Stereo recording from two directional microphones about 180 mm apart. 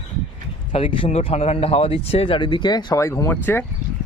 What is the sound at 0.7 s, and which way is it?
Speech, 30° left (ahead or behind).